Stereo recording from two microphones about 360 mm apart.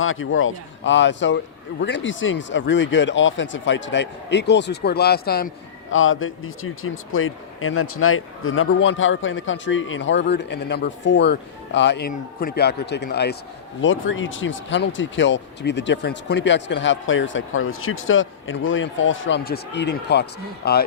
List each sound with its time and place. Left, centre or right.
0.0 s speech: left